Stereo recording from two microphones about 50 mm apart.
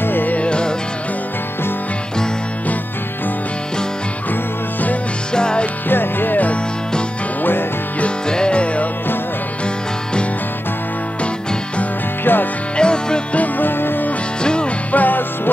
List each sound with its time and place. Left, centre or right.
0.0 s music: left
0.4 s music: centre
5.3 s music: centre
5.9 s music: left
8.3 s music: centre
12.3 s music: left
12.7 s music: centre
13.4 s music: left
14.4 s music: centre
14.9 s music: left